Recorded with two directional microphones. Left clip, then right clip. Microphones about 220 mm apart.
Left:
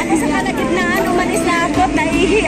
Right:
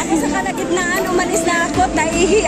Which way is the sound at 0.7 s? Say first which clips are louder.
Left 1 dB; 20° right (ahead or behind).